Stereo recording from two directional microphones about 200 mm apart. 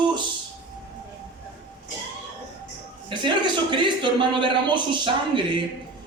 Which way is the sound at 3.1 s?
25° right (ahead or behind).